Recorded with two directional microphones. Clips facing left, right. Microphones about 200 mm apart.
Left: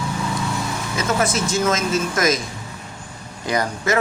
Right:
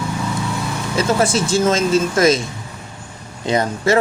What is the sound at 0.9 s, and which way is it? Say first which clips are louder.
Speech: right 5 dB; 30° right (ahead or behind).